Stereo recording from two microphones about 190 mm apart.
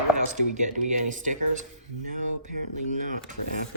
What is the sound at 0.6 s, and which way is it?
Speech, 40° right (ahead or behind).